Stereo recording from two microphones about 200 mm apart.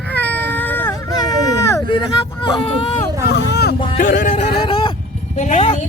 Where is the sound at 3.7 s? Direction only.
25° left (ahead or behind).